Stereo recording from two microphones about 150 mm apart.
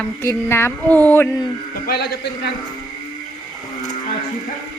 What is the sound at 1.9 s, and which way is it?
Speech, 90° left.